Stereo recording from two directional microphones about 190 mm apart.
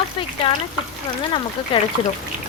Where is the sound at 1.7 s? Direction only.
30° left (ahead or behind).